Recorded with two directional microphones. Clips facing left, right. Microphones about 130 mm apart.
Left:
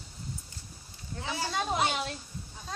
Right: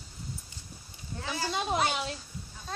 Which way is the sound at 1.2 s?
20° left (ahead or behind).